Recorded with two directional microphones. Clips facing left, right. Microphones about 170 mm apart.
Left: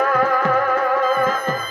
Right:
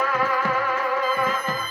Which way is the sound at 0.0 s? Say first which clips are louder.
Left 6 dB; 50° left (ahead or behind).